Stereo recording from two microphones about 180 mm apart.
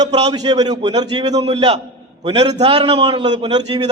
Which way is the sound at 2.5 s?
35° right (ahead or behind).